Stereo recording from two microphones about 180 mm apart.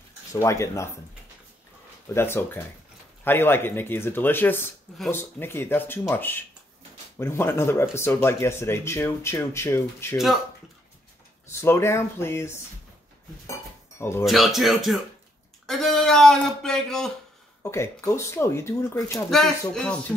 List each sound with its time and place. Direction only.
0.3 s speech: 15° left (ahead or behind)
2.1 s speech: 15° left (ahead or behind)
11.5 s speech: 15° left (ahead or behind)
13.5 s dishes: 15° left (ahead or behind)
14.2 s speech: centre (ahead or behind)
17.6 s speech: 15° left (ahead or behind)
19.7 s speech: 5° left (ahead or behind)